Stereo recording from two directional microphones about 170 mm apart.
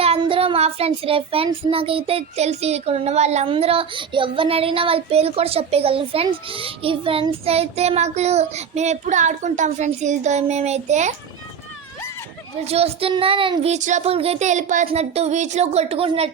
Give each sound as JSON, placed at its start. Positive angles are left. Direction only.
{"t": 0.0, "sound": "child singing", "side_deg": -35}
{"t": 1.7, "sound": "speech", "side_deg": -35}
{"t": 12.6, "sound": "speech", "side_deg": -35}